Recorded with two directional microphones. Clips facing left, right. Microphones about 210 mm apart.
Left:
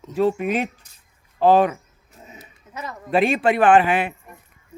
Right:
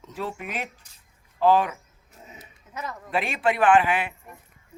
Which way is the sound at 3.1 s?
30° left (ahead or behind).